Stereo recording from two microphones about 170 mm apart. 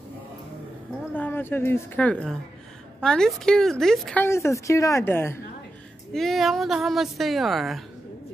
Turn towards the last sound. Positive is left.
turn(degrees=0)  # may be behind; listen again after turning